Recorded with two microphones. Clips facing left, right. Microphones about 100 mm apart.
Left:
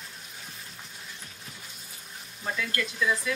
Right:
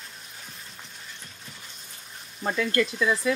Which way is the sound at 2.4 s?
40° right (ahead or behind).